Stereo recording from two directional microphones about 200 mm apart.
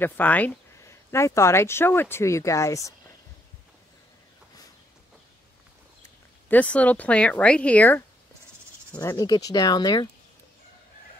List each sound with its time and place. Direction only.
0.0 s speech: 10° left (ahead or behind)
6.5 s speech: 5° left (ahead or behind)